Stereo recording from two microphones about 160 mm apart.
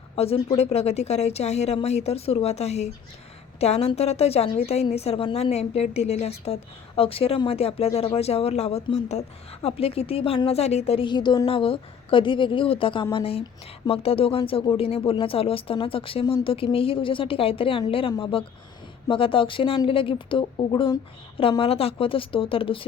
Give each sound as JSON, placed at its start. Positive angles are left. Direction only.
{"t": 0.2, "sound": "a woman's voice", "side_deg": 40}